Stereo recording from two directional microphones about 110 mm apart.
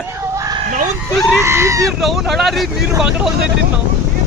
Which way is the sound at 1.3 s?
25° right (ahead or behind).